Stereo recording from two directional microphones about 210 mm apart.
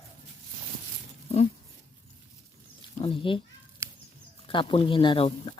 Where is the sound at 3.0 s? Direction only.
25° left (ahead or behind).